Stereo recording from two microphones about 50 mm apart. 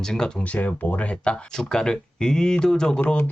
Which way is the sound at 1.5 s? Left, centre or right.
Centre.